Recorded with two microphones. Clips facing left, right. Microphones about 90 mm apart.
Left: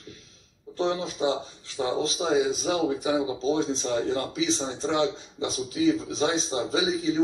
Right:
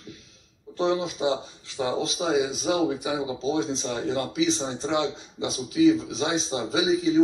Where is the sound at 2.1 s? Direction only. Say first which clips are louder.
Left 1 dB; 25° right (ahead or behind).